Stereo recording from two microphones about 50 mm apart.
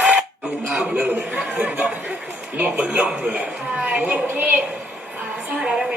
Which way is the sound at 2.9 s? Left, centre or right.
Right.